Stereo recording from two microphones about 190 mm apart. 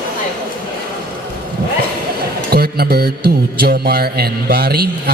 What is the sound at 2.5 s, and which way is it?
Mantra, 55° right (ahead or behind).